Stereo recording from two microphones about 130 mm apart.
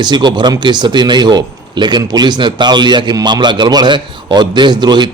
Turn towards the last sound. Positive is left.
turn(degrees=-35)  # may be behind; listen again after turning